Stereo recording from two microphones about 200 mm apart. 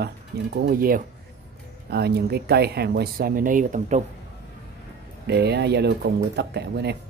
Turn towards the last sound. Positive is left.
turn(degrees=-55)  # may be behind; listen again after turning